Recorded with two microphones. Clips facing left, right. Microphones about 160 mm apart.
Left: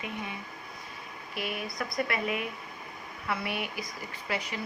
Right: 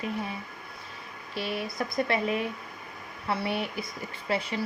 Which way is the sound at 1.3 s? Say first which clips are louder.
Right 3 dB; 30° right (ahead or behind).